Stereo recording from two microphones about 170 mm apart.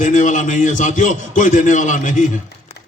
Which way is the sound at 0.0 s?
50° left (ahead or behind).